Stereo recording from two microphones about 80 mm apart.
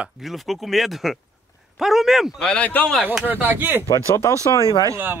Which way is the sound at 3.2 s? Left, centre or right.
Right.